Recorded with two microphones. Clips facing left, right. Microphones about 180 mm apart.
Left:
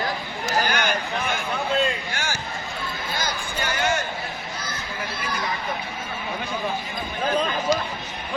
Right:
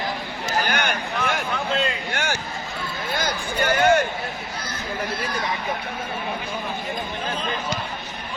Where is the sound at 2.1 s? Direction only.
65° right (ahead or behind).